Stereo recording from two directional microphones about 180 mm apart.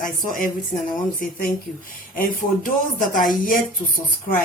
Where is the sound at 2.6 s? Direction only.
50° left (ahead or behind).